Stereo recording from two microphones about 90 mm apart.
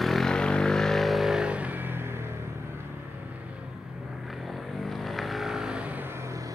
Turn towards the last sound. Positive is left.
turn(degrees=-15)  # may be behind; listen again after turning